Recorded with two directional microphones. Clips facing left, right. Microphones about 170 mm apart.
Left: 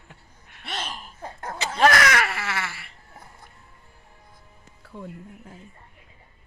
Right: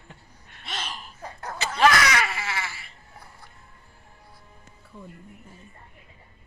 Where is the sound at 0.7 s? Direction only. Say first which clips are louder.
Left 2 dB; 60° left (ahead or behind).